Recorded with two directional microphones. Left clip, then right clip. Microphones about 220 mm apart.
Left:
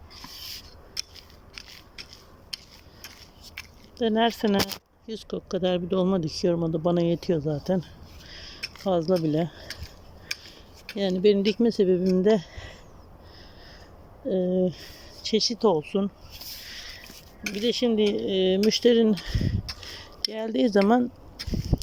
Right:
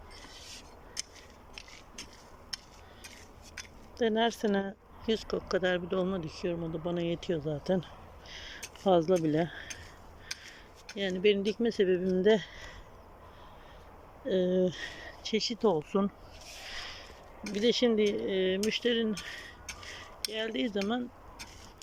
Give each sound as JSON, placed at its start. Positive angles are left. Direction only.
{"t": 3.9, "sound": "speech", "side_deg": 10}
{"t": 6.1, "sound": "speech", "side_deg": 25}
{"t": 8.3, "sound": "a sound", "side_deg": 5}
{"t": 8.7, "sound": "speech", "side_deg": -5}
{"t": 11.2, "sound": "speech", "side_deg": 15}
{"t": 14.3, "sound": "speech", "side_deg": 5}
{"t": 16.6, "sound": "a sound", "side_deg": 0}
{"t": 17.5, "sound": "speech", "side_deg": 0}